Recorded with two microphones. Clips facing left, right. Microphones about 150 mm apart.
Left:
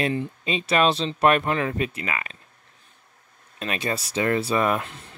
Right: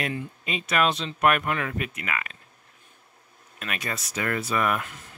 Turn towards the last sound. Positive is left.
turn(degrees=25)  # may be behind; listen again after turning